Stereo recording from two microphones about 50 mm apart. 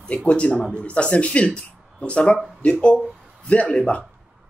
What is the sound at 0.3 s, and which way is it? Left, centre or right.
Speech, left.